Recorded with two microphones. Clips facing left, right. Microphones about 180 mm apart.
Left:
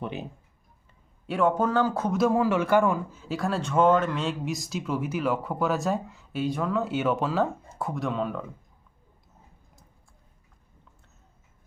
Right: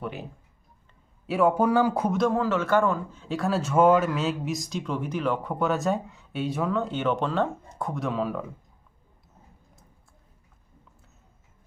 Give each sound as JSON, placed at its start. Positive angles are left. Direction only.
{"t": 0.0, "sound": "speech", "side_deg": 20}
{"t": 1.3, "sound": "speech", "side_deg": -10}
{"t": 2.1, "sound": "a man's voice", "side_deg": 10}